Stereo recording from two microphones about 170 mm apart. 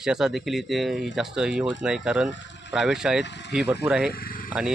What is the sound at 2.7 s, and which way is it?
Speech, 5° right (ahead or behind).